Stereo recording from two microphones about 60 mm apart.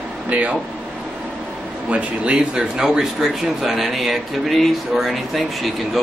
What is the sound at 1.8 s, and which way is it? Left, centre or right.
Speech, centre.